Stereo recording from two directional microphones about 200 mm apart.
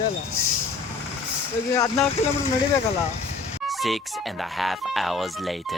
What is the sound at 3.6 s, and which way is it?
Speech, centre (ahead or behind).